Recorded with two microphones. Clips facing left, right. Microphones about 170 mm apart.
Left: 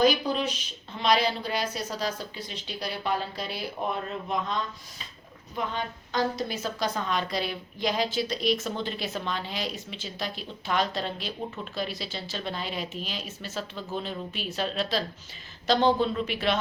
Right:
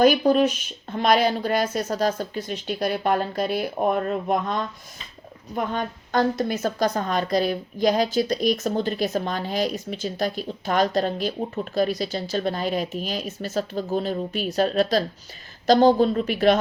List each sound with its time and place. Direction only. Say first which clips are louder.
0.0 s a woman's voice: right 7 dB; 50° right (ahead or behind)